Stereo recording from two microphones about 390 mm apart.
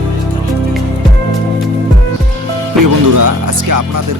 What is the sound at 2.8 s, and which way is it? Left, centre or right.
Music, right.